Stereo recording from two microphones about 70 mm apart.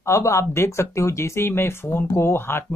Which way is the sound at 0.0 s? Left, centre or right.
Left.